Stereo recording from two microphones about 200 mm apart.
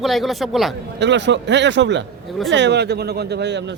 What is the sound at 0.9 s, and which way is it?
A man's voice, 60° right (ahead or behind).